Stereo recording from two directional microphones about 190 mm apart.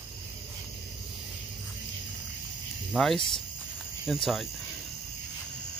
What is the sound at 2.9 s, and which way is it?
Speech, centre (ahead or behind).